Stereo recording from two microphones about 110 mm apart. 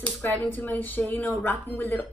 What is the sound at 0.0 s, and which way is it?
A woman's voice, 15° left (ahead or behind).